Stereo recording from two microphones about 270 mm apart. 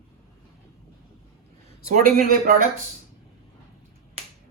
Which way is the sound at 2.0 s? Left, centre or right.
Right.